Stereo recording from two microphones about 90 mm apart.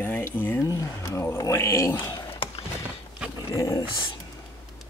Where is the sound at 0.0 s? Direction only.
20° left (ahead or behind).